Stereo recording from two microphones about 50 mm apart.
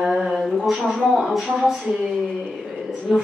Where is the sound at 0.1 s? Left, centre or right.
Centre.